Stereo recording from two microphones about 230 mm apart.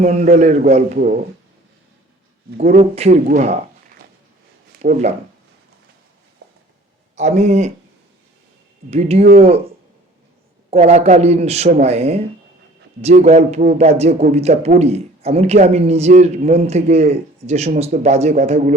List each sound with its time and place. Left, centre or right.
0.0 s speech: right
2.6 s speech: right
3.2 s a sound: right
4.8 s speech: right
7.2 s speech: right
8.9 s speech: right
10.7 s speech: right